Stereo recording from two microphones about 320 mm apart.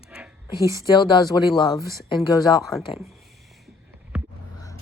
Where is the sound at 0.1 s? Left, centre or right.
Centre.